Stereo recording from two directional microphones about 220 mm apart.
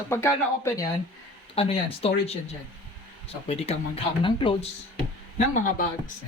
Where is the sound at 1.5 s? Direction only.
25° left (ahead or behind).